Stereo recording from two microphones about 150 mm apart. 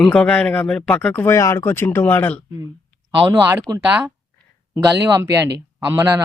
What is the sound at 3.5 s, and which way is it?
Speech, 20° right (ahead or behind).